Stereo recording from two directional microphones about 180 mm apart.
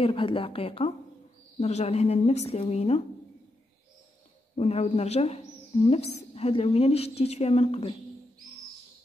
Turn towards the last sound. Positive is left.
turn(degrees=35)  # may be behind; listen again after turning